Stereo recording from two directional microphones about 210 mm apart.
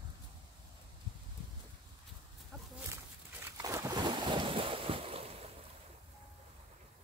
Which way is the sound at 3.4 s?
15° right (ahead or behind).